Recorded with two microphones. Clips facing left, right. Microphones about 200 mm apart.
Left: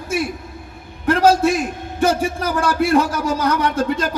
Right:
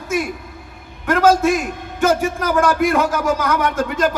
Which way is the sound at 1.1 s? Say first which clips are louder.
Even; 35° left (ahead or behind).